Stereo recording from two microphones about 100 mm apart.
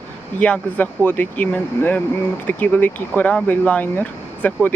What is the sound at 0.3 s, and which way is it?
Speech, 15° left (ahead or behind).